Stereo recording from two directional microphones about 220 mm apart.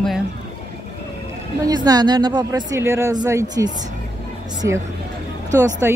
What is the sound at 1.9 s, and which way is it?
Speech, 20° right (ahead or behind).